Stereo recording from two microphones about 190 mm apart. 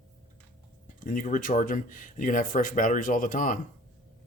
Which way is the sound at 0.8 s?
45° left (ahead or behind).